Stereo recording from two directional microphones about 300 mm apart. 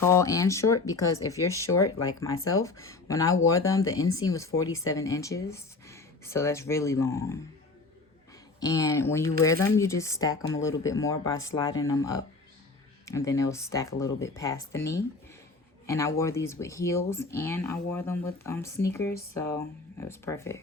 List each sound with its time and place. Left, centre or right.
0.0 s speech: centre
8.6 s speech: centre